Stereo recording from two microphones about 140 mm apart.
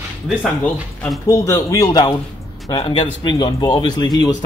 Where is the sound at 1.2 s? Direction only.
20° left (ahead or behind).